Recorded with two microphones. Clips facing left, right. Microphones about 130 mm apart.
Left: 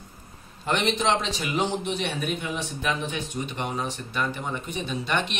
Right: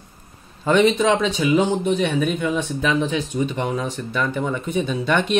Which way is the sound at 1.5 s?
50° right (ahead or behind).